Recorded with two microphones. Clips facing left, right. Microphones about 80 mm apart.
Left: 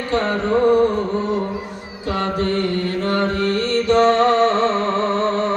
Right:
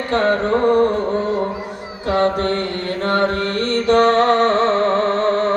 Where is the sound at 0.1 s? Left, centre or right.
Right.